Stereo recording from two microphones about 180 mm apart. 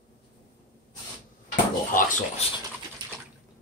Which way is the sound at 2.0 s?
45° left (ahead or behind).